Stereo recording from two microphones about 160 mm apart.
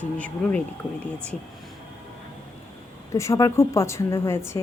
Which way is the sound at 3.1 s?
20° left (ahead or behind).